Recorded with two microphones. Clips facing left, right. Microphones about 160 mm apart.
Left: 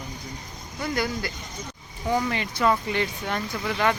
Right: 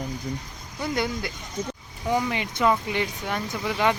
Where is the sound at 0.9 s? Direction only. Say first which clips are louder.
Even; 20° right (ahead or behind).